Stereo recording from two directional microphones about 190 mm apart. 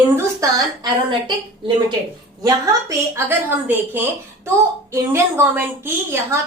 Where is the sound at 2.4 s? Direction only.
15° right (ahead or behind).